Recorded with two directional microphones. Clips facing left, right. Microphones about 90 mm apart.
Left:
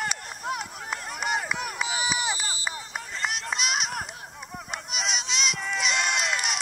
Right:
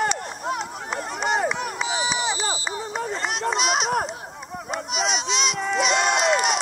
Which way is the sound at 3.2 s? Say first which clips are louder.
Right 4 dB; 25° right (ahead or behind).